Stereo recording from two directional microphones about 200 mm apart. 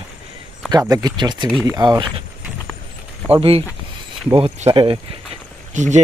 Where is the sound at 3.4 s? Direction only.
30° right (ahead or behind).